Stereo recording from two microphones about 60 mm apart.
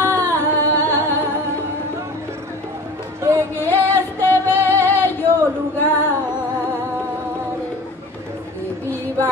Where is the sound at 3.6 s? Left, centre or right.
Left.